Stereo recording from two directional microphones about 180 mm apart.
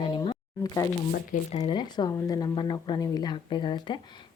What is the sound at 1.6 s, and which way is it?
Speech, 25° left (ahead or behind).